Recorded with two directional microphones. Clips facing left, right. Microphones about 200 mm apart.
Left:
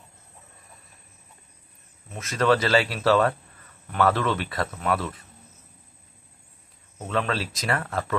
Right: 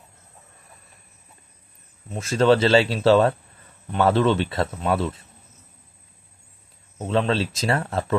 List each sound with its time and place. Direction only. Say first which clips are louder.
2.0 s speech: right 4 dB; 30° right (ahead or behind)
7.0 s speech: right 5 dB; 30° right (ahead or behind)